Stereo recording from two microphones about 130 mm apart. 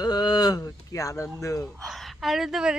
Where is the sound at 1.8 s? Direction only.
Centre (ahead or behind).